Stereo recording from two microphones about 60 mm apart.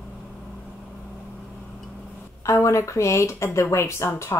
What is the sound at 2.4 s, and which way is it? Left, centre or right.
A woman's voice, left.